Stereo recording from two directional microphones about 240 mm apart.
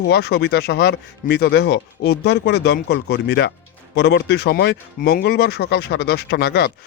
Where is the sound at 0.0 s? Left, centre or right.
Left.